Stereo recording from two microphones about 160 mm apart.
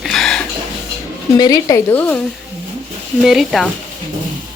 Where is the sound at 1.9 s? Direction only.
10° left (ahead or behind).